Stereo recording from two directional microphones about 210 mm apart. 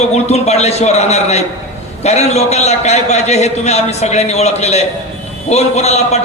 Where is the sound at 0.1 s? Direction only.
30° left (ahead or behind).